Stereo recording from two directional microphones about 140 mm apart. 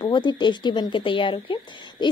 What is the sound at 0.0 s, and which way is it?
A woman's voice, 30° left (ahead or behind).